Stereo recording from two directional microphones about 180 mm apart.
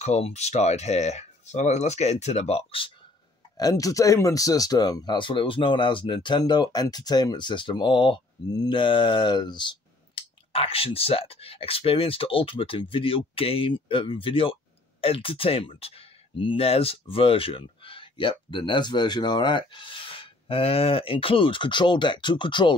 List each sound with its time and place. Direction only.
0.0 s speech: 35° left (ahead or behind)
3.5 s speech: 20° left (ahead or behind)